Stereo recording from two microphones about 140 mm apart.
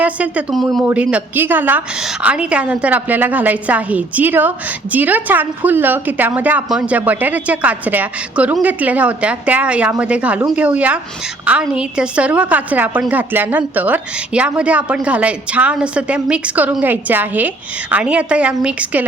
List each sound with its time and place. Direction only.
0.0 s a woman's voice: 10° right (ahead or behind)
0.9 s a woman's voice: 10° right (ahead or behind)